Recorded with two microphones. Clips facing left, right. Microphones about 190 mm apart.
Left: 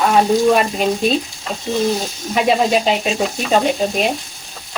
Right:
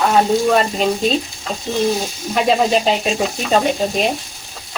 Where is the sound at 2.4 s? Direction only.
5° left (ahead or behind).